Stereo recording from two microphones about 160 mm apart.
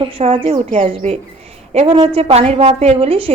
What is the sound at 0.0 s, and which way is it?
A woman's voice, 35° right (ahead or behind).